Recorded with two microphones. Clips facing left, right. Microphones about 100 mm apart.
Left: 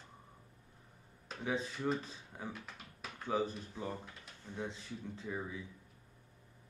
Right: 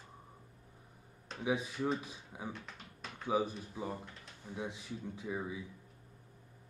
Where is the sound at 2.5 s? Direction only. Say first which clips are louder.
Right 1 dB; 5° left (ahead or behind).